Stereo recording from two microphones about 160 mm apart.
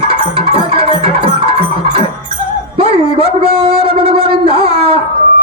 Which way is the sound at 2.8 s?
35° right (ahead or behind).